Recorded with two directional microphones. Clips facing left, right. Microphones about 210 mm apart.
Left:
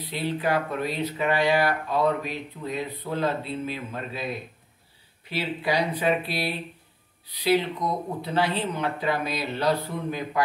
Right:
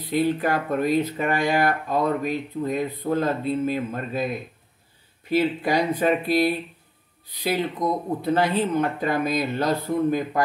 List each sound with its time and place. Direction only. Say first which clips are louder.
0.1 s speech: right 4 dB; 45° right (ahead or behind)
5.3 s speech: right 6 dB; 45° right (ahead or behind)
8.2 s speech: right 4 dB; 45° right (ahead or behind)